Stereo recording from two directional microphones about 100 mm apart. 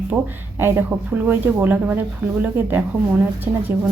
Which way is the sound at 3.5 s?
30° right (ahead or behind).